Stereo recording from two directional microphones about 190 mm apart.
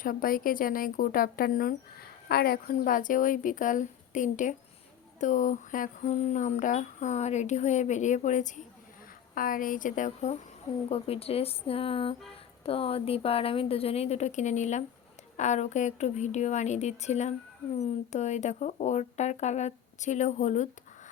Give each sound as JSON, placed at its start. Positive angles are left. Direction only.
{"t": 0.0, "sound": "speech", "side_deg": 50}
{"t": 10.8, "sound": "speech", "side_deg": 30}